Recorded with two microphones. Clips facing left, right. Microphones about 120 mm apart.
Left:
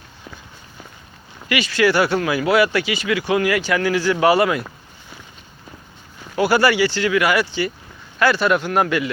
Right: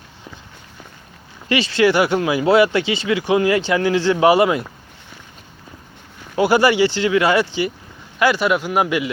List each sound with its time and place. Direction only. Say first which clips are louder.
1.5 s speech: right 2 dB; 30° right (ahead or behind)
6.3 s a man's voice: right 2 dB; 20° right (ahead or behind)